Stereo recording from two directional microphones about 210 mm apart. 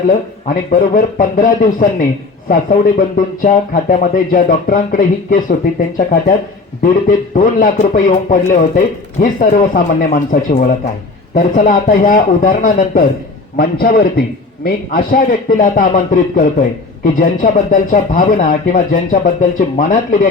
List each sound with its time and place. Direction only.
0.4 s a man's voice: 40° left (ahead or behind)